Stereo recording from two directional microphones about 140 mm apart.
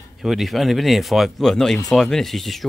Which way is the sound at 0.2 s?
Centre (ahead or behind).